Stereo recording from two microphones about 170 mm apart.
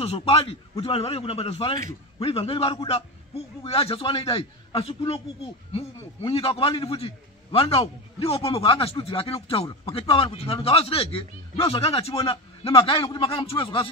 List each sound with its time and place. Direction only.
0.0 s a man's voice: 35° left (ahead or behind)
6.2 s a man's voice: 35° left (ahead or behind)